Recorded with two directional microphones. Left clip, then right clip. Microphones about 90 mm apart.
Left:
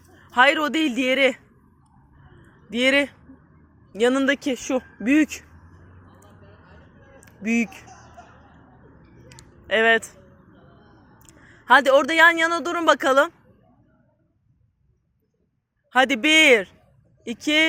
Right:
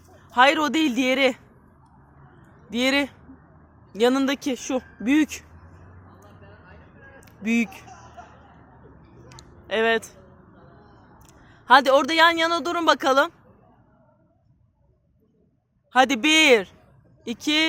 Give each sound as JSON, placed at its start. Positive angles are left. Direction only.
{"t": 0.2, "sound": "speech", "side_deg": 20}
{"t": 2.6, "sound": "speech", "side_deg": 15}
{"t": 4.4, "sound": "speech", "side_deg": 20}
{"t": 6.1, "sound": "vehicle", "side_deg": 20}
{"t": 7.2, "sound": "speech", "side_deg": 0}
{"t": 7.9, "sound": "music", "side_deg": 20}
{"t": 9.6, "sound": "a sound", "side_deg": 20}
{"t": 11.2, "sound": "speech", "side_deg": 15}
{"t": 15.9, "sound": "speech", "side_deg": 10}